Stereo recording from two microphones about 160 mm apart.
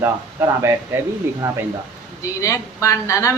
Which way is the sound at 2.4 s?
20° left (ahead or behind).